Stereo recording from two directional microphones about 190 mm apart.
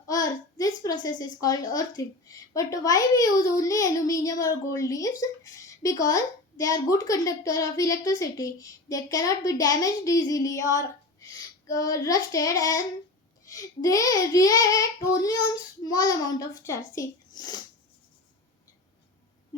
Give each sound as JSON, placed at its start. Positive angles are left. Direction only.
{"t": 0.1, "sound": "a child's voice", "side_deg": 20}